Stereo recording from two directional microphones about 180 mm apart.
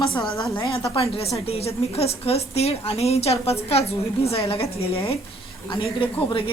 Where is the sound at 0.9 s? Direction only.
35° left (ahead or behind).